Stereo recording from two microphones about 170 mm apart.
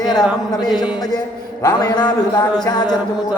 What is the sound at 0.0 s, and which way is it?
Music, 25° left (ahead or behind).